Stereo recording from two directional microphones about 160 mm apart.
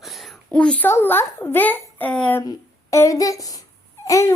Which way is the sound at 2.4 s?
20° left (ahead or behind).